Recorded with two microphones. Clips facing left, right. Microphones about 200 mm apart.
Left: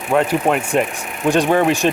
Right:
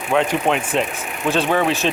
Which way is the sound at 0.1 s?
5° left (ahead or behind).